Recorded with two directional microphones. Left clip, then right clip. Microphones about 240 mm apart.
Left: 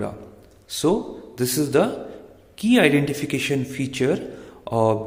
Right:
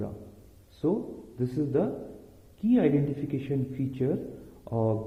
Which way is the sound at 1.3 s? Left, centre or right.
Centre.